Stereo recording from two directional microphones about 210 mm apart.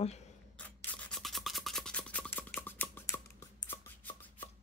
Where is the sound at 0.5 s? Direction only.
5° left (ahead or behind).